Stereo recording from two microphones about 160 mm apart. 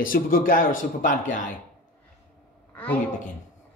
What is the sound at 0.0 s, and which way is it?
A man's voice, 60° left (ahead or behind).